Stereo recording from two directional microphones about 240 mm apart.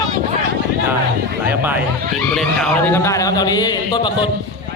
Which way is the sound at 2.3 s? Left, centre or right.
Centre.